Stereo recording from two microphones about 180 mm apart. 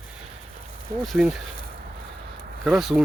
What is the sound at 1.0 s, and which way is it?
Speech, centre (ahead or behind).